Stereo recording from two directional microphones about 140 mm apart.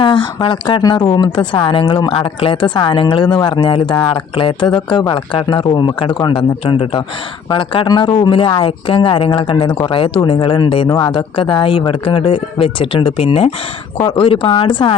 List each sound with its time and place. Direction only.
0.0 s a woman's voice: 35° left (ahead or behind)